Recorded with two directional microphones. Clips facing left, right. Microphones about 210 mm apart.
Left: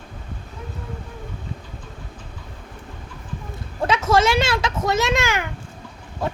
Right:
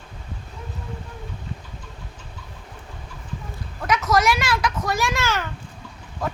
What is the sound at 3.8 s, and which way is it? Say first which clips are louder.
A child's voice: left 3 dB; 30° left (ahead or behind).